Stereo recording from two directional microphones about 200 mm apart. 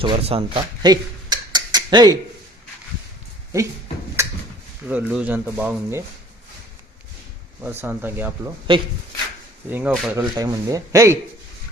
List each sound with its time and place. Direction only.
0.0 s a sound: 25° right (ahead or behind)
4.2 s a sound: 15° right (ahead or behind)
4.9 s speech: 5° right (ahead or behind)
7.6 s speech: 10° right (ahead or behind)
8.7 s speech: 25° right (ahead or behind)
9.6 s speech: 10° right (ahead or behind)